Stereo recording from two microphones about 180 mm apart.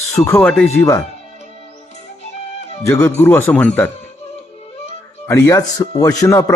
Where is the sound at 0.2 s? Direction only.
15° left (ahead or behind).